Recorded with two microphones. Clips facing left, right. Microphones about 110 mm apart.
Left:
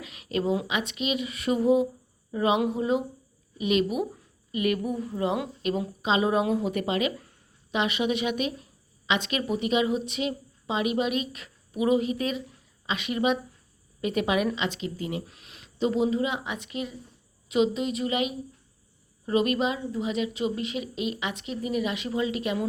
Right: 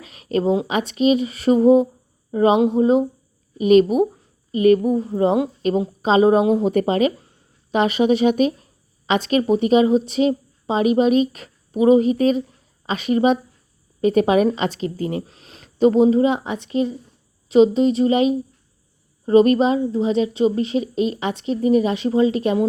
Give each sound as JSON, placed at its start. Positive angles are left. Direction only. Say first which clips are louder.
{"t": 0.0, "sound": "a sound", "louder": "right 8 dB", "side_deg": -35}
{"t": 0.7, "sound": "a woman's voice", "louder": "right 11 dB", "side_deg": -40}
{"t": 15.6, "sound": "a woman's voice", "louder": "right 11 dB", "side_deg": -45}